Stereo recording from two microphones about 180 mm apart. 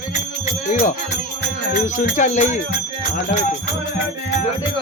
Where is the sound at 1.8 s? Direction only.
45° left (ahead or behind).